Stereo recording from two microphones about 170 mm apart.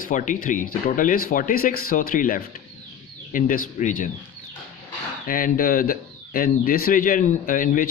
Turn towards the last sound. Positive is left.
turn(degrees=50)  # may be behind; listen again after turning